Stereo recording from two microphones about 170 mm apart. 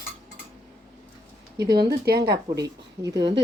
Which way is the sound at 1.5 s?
70° right (ahead or behind).